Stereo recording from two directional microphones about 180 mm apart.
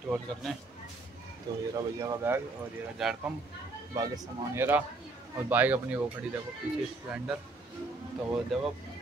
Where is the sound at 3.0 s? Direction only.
5° right (ahead or behind).